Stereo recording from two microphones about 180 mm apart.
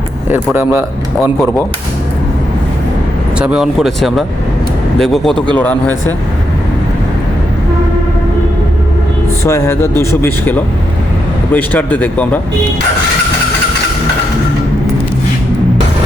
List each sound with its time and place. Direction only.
0.3 s speech: 10° right (ahead or behind)
3.3 s speech: 5° right (ahead or behind)
9.4 s speech: 15° left (ahead or behind)